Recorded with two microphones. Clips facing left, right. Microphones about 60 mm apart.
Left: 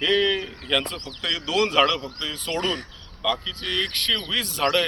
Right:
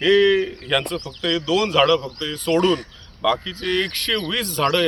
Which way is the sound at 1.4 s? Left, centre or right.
Left.